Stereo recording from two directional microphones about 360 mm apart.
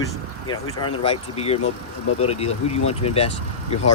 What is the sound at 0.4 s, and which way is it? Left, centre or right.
Speech, centre.